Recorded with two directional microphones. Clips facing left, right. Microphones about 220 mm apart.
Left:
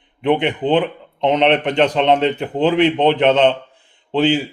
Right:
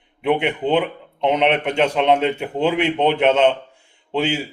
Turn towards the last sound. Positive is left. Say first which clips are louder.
# left 5 dB
turn(degrees=-10)  # may be behind; listen again after turning